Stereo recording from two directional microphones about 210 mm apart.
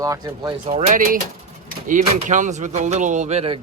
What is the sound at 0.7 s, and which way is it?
Speech, 40° right (ahead or behind).